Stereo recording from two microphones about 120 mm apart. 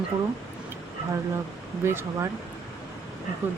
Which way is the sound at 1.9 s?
20° right (ahead or behind).